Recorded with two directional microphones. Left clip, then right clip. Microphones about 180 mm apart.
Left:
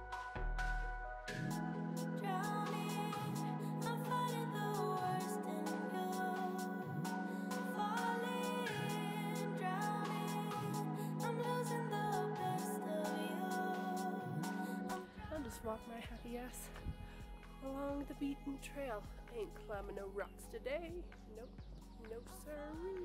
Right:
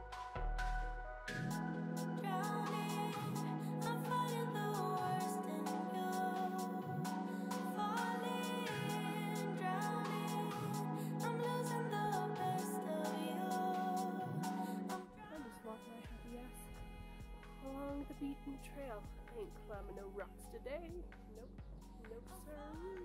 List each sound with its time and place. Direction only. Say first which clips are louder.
1.2 s music: right 3 dB; centre (ahead or behind)
17.6 s speech: left 3 dB; 5° right (ahead or behind)
22.5 s speech: left 4 dB; centre (ahead or behind)